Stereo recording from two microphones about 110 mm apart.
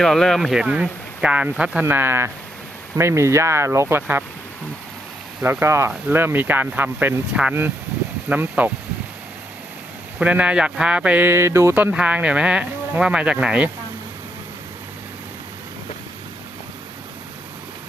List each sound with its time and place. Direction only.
0.0 s speech: 5° left (ahead or behind)
1.8 s speech: 20° right (ahead or behind)
5.4 s speech: 20° right (ahead or behind)
10.2 s speech: 10° right (ahead or behind)
11.8 s speech: 15° right (ahead or behind)